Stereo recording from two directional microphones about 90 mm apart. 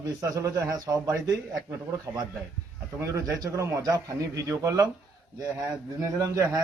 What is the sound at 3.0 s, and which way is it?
A man's voice, 35° right (ahead or behind).